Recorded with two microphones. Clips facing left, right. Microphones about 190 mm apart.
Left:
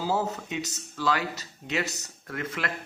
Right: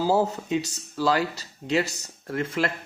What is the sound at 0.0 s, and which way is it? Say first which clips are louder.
Speech: right 5 dB; 35° right (ahead or behind).